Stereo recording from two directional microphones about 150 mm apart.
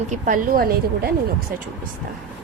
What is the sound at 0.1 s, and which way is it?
A woman's voice, 70° right (ahead or behind).